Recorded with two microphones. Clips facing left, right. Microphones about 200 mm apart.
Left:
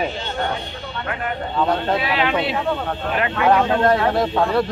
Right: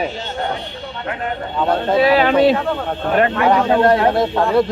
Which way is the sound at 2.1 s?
40° right (ahead or behind).